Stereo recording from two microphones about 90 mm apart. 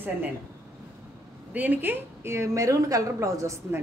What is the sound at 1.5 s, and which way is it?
A woman's voice, 20° right (ahead or behind).